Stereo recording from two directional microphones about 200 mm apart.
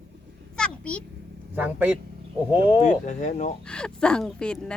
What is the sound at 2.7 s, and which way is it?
Speech, 35° left (ahead or behind).